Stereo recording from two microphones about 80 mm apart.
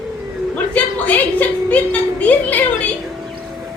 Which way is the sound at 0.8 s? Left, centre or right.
Centre.